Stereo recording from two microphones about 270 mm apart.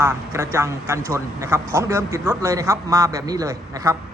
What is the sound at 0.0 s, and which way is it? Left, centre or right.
A man's voice, centre.